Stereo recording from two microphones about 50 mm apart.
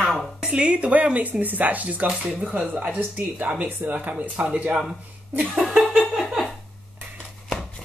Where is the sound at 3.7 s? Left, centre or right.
Right.